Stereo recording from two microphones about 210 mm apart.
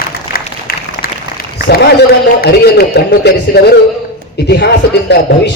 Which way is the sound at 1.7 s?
50° left (ahead or behind).